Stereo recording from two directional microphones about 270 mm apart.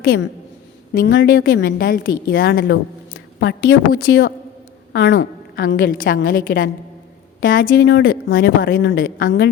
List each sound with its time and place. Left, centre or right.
0.9 s a woman's voice: left
7.5 s a woman's voice: left